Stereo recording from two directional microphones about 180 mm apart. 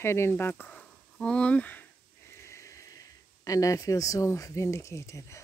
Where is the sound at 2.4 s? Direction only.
15° left (ahead or behind).